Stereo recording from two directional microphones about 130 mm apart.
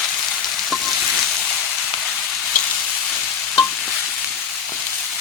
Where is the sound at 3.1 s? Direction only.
5° left (ahead or behind).